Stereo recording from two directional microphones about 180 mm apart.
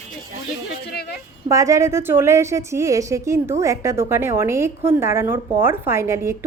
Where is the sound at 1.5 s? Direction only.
15° right (ahead or behind).